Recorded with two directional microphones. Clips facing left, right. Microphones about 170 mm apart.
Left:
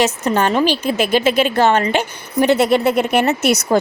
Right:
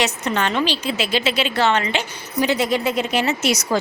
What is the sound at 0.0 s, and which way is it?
A woman's voice, 45° left (ahead or behind).